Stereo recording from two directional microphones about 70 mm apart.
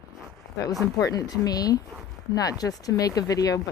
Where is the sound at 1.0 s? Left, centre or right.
Left.